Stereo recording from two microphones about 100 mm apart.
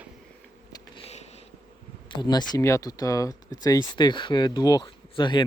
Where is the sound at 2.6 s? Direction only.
35° left (ahead or behind).